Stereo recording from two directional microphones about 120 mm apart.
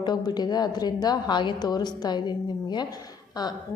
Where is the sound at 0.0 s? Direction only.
35° left (ahead or behind).